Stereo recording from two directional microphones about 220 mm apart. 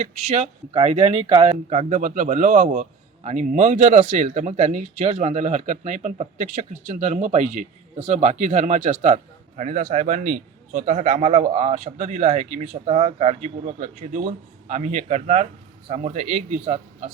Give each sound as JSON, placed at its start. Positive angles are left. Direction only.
{"t": 0.0, "sound": "speech", "side_deg": -30}